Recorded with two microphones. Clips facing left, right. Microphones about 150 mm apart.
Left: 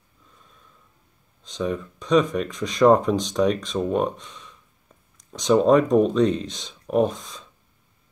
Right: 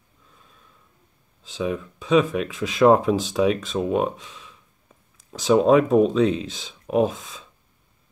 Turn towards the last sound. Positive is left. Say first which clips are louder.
# even
turn(degrees=-5)  # may be behind; listen again after turning